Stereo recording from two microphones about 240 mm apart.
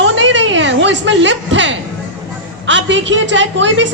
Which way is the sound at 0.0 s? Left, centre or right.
Right.